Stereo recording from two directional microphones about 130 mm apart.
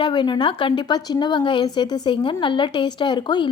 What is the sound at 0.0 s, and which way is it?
Speech, 35° left (ahead or behind).